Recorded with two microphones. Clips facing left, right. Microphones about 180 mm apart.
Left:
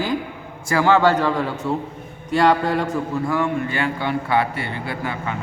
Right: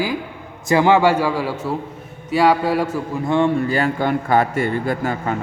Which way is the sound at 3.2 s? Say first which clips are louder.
Right 9 dB; 30° right (ahead or behind).